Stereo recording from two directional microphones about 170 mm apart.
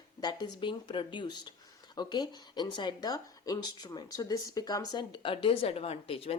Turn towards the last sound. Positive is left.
turn(degrees=35)  # may be behind; listen again after turning